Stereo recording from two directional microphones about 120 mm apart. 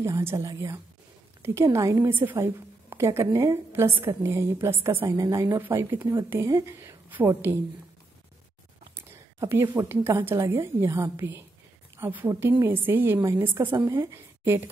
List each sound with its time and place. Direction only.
0.0 s a woman's voice: 20° right (ahead or behind)
8.9 s a woman's voice: 20° right (ahead or behind)